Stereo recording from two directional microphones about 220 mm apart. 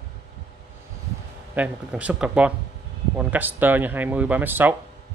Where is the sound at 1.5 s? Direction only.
5° right (ahead or behind).